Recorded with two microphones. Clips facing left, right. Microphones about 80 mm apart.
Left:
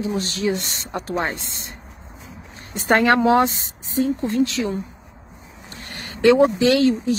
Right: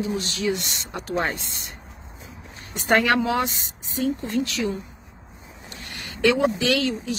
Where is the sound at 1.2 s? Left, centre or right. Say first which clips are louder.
Left 1 dB; left.